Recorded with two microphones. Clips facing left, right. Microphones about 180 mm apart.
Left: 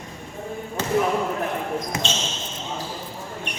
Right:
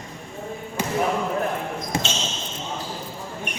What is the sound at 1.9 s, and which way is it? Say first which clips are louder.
Basketball bounce: right 2 dB; 30° right (ahead or behind).